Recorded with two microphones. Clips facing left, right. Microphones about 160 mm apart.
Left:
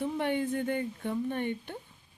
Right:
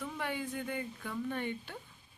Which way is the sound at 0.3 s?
50° left (ahead or behind).